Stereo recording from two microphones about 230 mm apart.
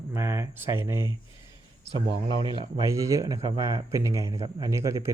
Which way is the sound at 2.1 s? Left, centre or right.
Centre.